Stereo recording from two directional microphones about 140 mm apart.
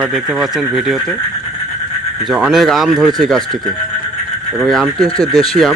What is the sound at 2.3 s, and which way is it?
Speech, 5° right (ahead or behind).